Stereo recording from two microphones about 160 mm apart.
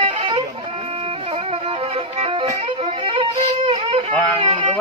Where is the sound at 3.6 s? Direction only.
35° right (ahead or behind).